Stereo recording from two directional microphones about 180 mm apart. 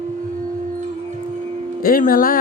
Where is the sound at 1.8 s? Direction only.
55° left (ahead or behind).